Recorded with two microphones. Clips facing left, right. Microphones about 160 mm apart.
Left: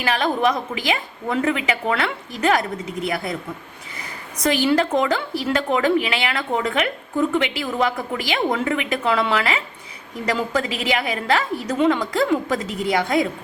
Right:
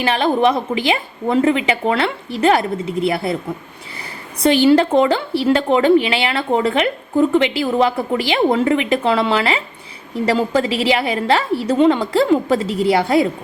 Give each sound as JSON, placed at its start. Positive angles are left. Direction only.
{"t": 0.0, "sound": "a woman's voice", "side_deg": -30}
{"t": 4.4, "sound": "a woman's voice", "side_deg": -30}